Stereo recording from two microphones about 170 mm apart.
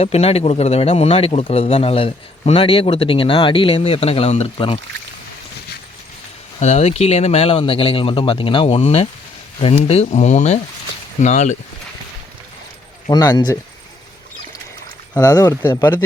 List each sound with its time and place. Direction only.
0.0 s speech: 35° left (ahead or behind)
6.6 s speech: 40° left (ahead or behind)
13.1 s speech: 25° left (ahead or behind)
15.1 s speech: 20° left (ahead or behind)